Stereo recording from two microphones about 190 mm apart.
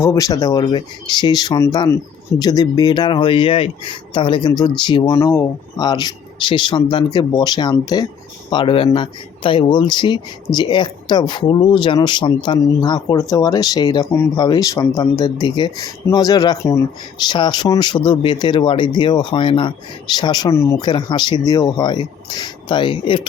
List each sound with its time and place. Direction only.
0.0 s speech: 15° left (ahead or behind)